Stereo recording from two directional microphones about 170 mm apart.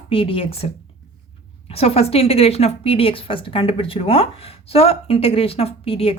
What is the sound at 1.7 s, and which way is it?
A woman's voice, 35° left (ahead or behind).